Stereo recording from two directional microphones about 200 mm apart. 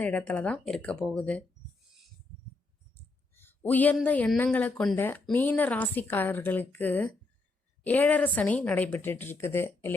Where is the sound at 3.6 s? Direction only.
10° left (ahead or behind).